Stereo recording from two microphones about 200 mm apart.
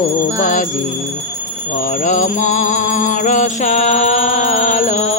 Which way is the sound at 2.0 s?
40° left (ahead or behind).